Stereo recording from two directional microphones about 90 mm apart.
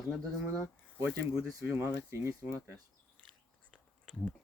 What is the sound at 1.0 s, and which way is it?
Speech, 15° right (ahead or behind).